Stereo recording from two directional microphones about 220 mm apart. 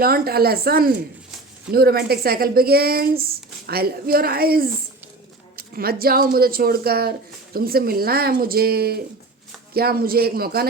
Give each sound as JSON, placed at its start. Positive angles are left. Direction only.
{"t": 0.0, "sound": "speech", "side_deg": -45}